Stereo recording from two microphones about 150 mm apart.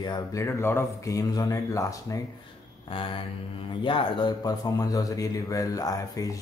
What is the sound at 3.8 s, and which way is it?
A man's voice, 35° left (ahead or behind).